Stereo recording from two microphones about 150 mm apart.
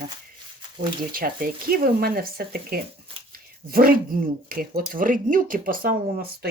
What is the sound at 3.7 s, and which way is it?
Speech, 75° right (ahead or behind).